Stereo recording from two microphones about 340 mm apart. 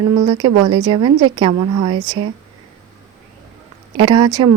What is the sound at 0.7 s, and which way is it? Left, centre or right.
Speech, centre.